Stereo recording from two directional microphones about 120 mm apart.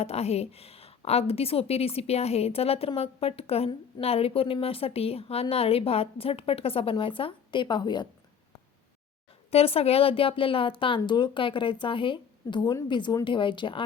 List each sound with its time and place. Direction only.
0.0 s a woman's voice: 60° left (ahead or behind); by 8.0 s 40° left (ahead or behind)
9.5 s a woman's voice: 55° left (ahead or behind)